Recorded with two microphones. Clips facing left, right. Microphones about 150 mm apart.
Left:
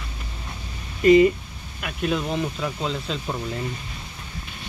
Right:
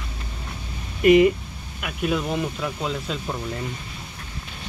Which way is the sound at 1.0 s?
15° right (ahead or behind).